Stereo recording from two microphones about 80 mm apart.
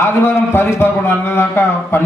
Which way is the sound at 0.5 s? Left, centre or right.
Left.